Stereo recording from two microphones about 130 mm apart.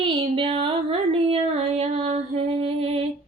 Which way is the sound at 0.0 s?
45° right (ahead or behind).